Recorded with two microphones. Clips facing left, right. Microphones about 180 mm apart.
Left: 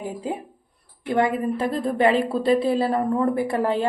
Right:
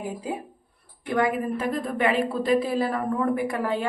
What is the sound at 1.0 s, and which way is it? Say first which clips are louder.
A woman's voice: left 3 dB; 25° left (ahead or behind).